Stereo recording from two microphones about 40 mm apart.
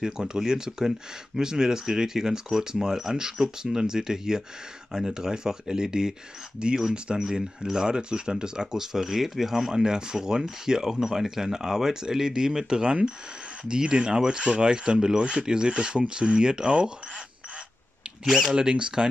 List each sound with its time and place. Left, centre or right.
0.0 s speech: centre
18.2 s speech: centre
18.5 s speech: right